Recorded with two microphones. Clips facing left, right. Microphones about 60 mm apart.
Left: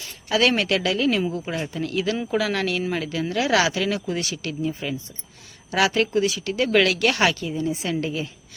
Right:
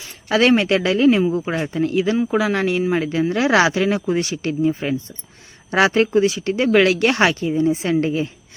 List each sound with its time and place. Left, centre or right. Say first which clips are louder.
0.3 s speech: right 4 dB; right
0.5 s speech: right 6 dB; right